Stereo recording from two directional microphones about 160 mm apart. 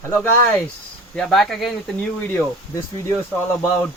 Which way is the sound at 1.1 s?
Centre (ahead or behind).